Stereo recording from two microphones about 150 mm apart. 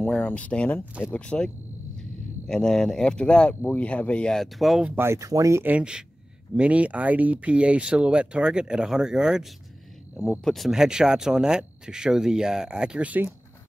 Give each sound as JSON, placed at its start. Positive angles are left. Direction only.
{"t": 0.0, "sound": "speech", "side_deg": 5}
{"t": 4.9, "sound": "speech", "side_deg": -15}